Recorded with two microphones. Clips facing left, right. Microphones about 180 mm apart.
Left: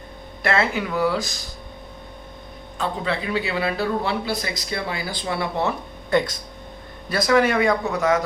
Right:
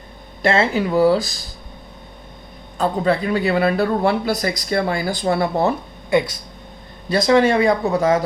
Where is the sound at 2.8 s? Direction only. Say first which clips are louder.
Right 7 dB; 40° right (ahead or behind).